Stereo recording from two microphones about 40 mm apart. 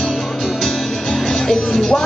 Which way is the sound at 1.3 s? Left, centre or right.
Centre.